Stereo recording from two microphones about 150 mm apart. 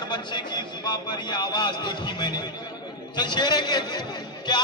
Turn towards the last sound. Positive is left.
turn(degrees=30)  # may be behind; listen again after turning